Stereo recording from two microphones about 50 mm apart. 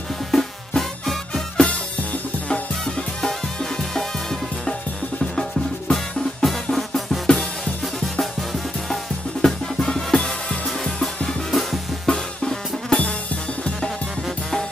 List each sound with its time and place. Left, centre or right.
0.3 s music: centre
2.8 s music: centre
6.4 s drum: centre
7.3 s music: centre
11.2 s drum kit: centre
12.4 s music: centre